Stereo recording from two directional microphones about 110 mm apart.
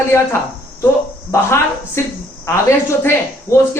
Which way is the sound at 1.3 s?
25° left (ahead or behind).